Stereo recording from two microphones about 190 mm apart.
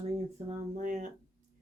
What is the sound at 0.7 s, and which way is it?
Speech, 40° right (ahead or behind).